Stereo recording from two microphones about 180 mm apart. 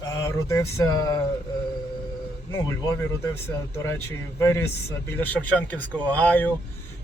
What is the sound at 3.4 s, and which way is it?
Speech, 15° left (ahead or behind).